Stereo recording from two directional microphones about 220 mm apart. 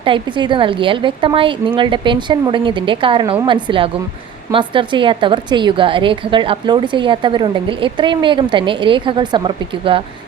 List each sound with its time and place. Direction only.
0.0 s a woman's voice: 20° right (ahead or behind)